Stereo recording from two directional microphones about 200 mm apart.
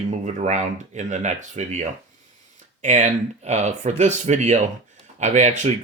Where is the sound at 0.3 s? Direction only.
35° right (ahead or behind).